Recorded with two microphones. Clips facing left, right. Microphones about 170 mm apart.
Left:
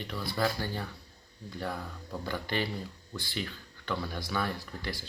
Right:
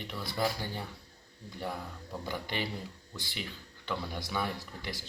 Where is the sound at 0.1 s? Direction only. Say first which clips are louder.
Left 2 dB; 20° right (ahead or behind).